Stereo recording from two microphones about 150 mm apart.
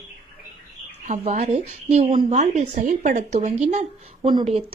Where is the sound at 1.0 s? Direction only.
50° right (ahead or behind).